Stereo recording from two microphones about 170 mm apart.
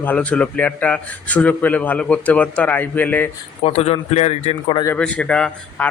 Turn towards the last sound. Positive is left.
turn(degrees=5)  # may be behind; listen again after turning